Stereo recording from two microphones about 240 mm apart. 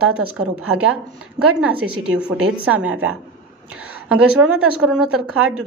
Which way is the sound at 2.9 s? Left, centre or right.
Right.